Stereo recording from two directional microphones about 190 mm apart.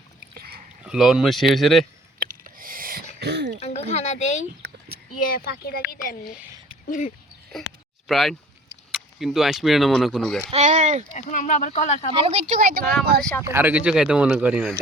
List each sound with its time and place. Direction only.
0.3 s a sound: 50° right (ahead or behind)
0.9 s speech: 5° right (ahead or behind)
2.1 s a sound: 50° right (ahead or behind)
3.2 s throat clearing: 60° right (ahead or behind)
3.6 s speech: 35° left (ahead or behind)
4.6 s a sound: 65° right (ahead or behind)
5.2 s speech: 50° left (ahead or behind)
6.3 s speech: 10° right (ahead or behind)
6.8 s speech: 45° left (ahead or behind)
8.0 s speech: centre (ahead or behind)
10.5 s speech: 40° right (ahead or behind)
11.1 s speech: 40° left (ahead or behind)
12.1 s speech: 30° right (ahead or behind)
13.5 s speech: 10° right (ahead or behind)